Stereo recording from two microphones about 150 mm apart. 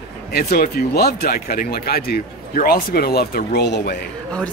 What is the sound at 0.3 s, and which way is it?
Speech, 90° left.